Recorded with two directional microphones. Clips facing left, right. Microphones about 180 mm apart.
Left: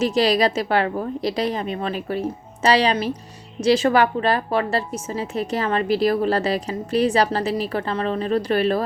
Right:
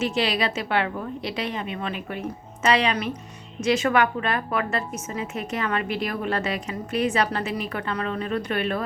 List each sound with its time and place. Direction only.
0.0 s a woman's voice: 40° left (ahead or behind)